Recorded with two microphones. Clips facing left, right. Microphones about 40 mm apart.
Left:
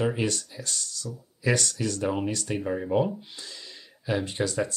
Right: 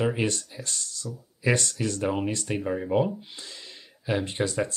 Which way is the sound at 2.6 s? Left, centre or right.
Centre.